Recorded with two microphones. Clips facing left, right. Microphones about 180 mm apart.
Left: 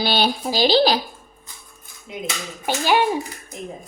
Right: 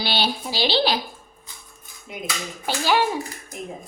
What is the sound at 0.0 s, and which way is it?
Speech, 45° left (ahead or behind).